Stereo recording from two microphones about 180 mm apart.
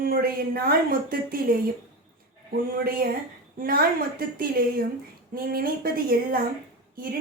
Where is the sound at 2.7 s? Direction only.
55° right (ahead or behind).